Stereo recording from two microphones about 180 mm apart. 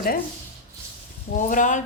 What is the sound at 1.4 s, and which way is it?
Speech, 45° left (ahead or behind).